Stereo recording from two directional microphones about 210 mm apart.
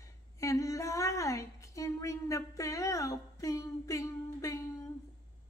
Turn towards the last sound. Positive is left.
turn(degrees=15)  # may be behind; listen again after turning